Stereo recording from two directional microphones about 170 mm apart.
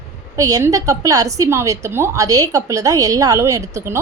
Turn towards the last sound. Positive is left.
turn(degrees=-15)  # may be behind; listen again after turning